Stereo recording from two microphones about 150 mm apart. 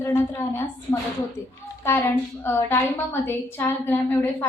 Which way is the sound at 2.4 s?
15° left (ahead or behind).